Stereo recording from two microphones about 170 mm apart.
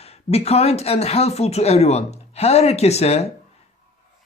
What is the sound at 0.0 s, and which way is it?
Speech, 35° left (ahead or behind).